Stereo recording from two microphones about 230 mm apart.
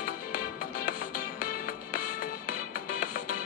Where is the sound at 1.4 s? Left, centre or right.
Left.